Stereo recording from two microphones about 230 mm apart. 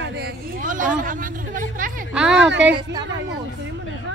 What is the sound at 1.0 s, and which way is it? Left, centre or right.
Hubbub, right.